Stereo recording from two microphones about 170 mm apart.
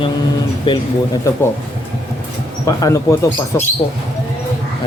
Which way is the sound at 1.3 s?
15° left (ahead or behind).